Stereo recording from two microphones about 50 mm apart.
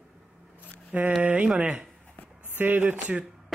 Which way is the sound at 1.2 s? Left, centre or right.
Right.